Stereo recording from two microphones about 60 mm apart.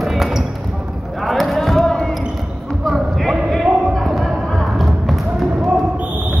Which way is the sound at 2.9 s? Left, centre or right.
Centre.